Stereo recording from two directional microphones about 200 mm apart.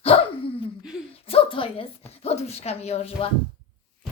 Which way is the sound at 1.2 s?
30° left (ahead or behind).